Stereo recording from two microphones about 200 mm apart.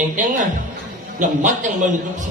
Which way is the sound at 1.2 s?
40° right (ahead or behind).